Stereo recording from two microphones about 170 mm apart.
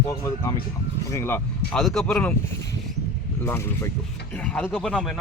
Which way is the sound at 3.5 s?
15° left (ahead or behind).